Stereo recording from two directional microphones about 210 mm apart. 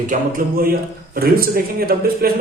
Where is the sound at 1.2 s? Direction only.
45° right (ahead or behind).